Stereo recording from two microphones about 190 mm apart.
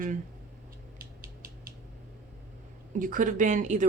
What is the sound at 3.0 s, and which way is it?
Speech, 45° right (ahead or behind).